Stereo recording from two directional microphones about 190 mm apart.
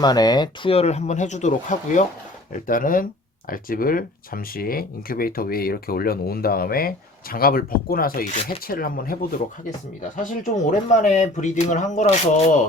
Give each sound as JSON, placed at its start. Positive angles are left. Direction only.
{"t": 0.0, "sound": "speech", "side_deg": 20}